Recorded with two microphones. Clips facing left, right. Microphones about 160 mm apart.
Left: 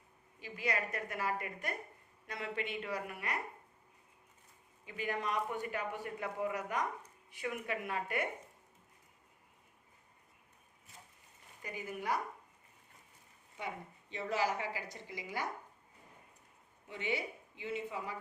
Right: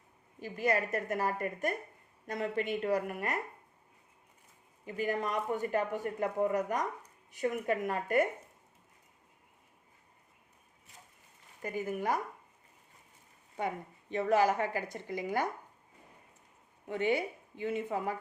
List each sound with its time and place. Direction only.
0.3 s speech: 45° right (ahead or behind)
4.9 s speech: 45° right (ahead or behind)
11.6 s speech: 50° right (ahead or behind)
13.6 s speech: 50° right (ahead or behind)
16.8 s a woman's voice: 50° right (ahead or behind)